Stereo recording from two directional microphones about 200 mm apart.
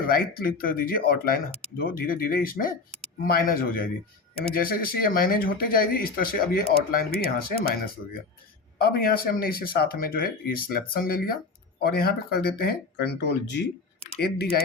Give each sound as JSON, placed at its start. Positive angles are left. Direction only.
{"t": 0.1, "sound": "speech", "side_deg": 45}
{"t": 8.8, "sound": "speech", "side_deg": 50}